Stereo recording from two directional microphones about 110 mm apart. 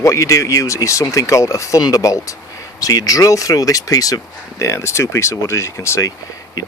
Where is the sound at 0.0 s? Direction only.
30° left (ahead or behind).